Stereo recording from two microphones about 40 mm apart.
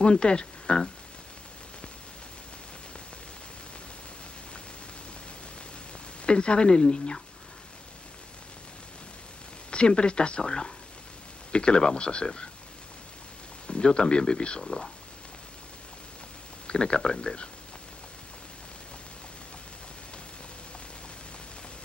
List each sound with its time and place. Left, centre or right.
0.0 s speech: left
6.2 s speech: left
9.7 s speech: left
13.7 s speech: left
16.6 s speech: left